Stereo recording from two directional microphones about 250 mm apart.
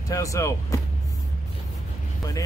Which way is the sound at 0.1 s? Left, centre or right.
Centre.